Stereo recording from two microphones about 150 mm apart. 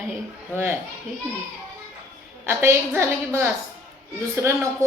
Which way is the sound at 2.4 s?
15° right (ahead or behind).